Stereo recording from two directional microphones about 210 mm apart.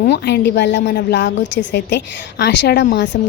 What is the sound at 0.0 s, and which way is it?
A woman's voice, 50° left (ahead or behind).